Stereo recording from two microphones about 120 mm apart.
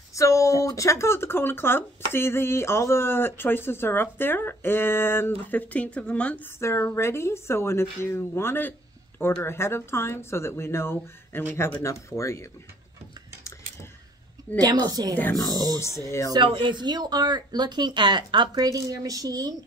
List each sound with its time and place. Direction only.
0.1 s speech: 25° left (ahead or behind)
14.6 s speech: 35° right (ahead or behind)
15.8 s speech: 25° left (ahead or behind)
16.4 s speech: 45° right (ahead or behind)